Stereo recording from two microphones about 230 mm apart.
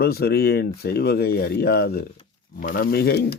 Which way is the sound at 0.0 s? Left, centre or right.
Left.